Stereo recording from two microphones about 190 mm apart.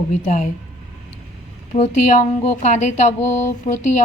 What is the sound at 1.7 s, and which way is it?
A woman's voice, 35° left (ahead or behind).